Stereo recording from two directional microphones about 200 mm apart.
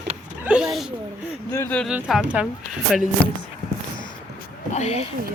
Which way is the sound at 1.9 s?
5° right (ahead or behind).